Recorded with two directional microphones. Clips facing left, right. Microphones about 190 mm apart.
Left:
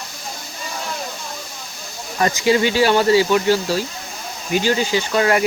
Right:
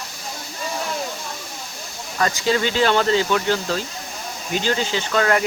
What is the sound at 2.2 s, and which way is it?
Speech, 20° left (ahead or behind).